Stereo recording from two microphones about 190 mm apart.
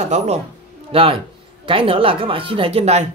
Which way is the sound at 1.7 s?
30° right (ahead or behind).